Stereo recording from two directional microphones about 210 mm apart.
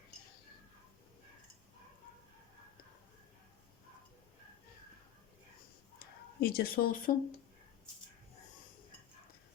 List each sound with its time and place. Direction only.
6.0 s speech: 45° left (ahead or behind)